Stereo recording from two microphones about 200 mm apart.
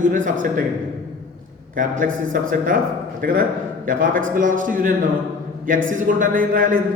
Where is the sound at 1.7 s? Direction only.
45° right (ahead or behind).